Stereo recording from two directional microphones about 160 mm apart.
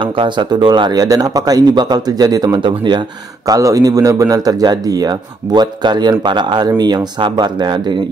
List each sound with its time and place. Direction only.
0.0 s a man's voice: 30° right (ahead or behind)